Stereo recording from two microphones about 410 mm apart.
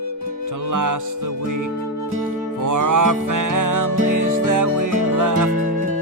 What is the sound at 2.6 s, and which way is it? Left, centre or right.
Music, right.